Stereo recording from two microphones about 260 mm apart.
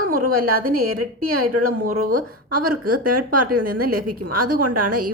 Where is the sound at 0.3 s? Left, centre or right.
Right.